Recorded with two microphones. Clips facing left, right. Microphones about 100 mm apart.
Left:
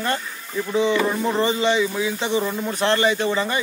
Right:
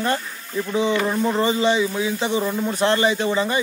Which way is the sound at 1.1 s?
Centre (ahead or behind).